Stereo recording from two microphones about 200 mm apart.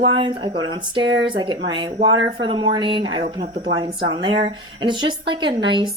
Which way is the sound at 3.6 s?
25° right (ahead or behind).